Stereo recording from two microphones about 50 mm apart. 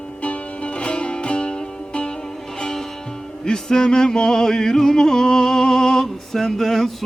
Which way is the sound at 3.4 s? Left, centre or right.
Centre.